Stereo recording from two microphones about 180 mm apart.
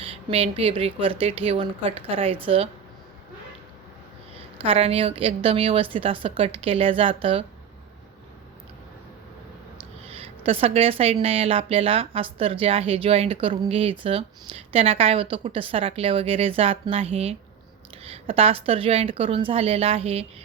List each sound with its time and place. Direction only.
0.0 s speech: 30° right (ahead or behind)
4.6 s speech: 30° right (ahead or behind)
10.1 s speech: 30° right (ahead or behind)